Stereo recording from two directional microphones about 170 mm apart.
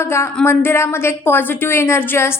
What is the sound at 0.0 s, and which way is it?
A woman's voice, 15° left (ahead or behind).